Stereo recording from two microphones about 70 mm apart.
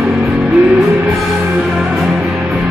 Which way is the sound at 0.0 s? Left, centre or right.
Centre.